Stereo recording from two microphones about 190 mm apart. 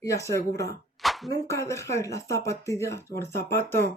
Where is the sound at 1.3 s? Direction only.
15° left (ahead or behind).